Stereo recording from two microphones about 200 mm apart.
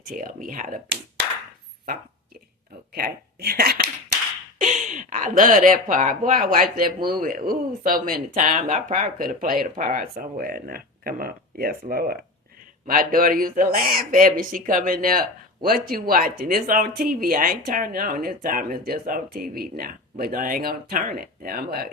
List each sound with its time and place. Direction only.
0.0 s speech: 45° right (ahead or behind)
2.9 s speech: 50° right (ahead or behind)